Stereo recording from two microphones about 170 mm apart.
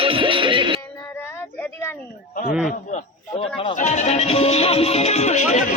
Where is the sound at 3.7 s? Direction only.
45° left (ahead or behind).